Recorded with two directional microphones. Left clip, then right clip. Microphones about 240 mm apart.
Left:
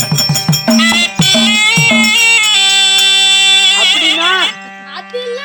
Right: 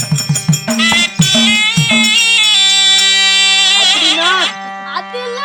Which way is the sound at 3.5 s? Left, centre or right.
Centre.